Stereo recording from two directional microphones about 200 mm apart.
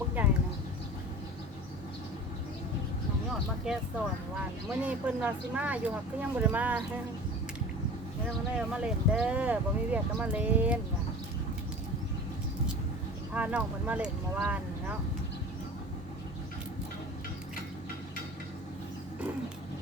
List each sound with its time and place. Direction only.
0.2 s a sound: 10° right (ahead or behind)
3.7 s speech: 5° right (ahead or behind)
8.5 s speech: 5° right (ahead or behind)
13.3 s speech: 5° right (ahead or behind)